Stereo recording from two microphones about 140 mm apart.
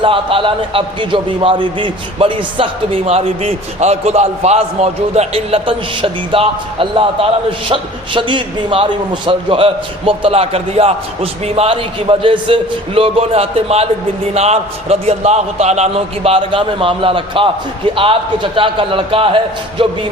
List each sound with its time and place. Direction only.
0.0 s a man's voice: 40° right (ahead or behind)